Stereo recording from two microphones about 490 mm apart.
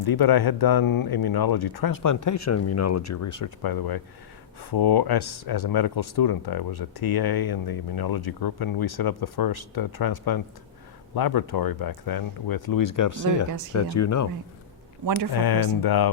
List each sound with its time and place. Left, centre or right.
0.0 s speech: left
15.3 s speech: left